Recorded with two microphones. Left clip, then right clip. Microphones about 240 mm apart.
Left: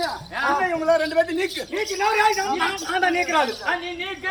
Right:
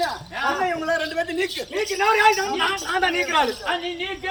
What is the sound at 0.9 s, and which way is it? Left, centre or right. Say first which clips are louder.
A man's voice: left 4 dB; centre.